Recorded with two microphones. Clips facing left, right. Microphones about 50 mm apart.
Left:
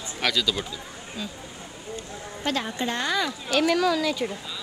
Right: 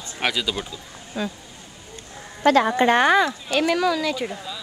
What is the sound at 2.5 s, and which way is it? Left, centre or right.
Speech, right.